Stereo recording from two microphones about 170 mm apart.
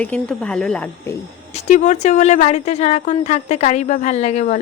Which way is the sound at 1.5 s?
45° left (ahead or behind).